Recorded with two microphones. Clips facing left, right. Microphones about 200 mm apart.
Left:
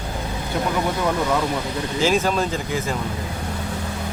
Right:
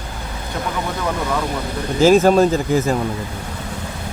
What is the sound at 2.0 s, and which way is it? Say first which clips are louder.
Speech: right 9 dB; 45° right (ahead or behind).